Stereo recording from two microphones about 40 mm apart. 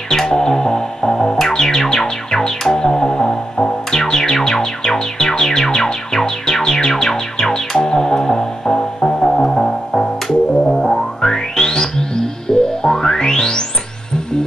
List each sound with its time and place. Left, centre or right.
0.1 s music: centre